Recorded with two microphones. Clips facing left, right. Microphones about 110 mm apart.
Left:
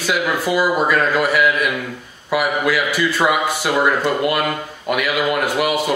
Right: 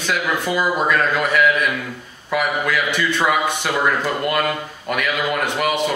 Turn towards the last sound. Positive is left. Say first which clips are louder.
# left 1 dB
turn(degrees=5)  # may be behind; listen again after turning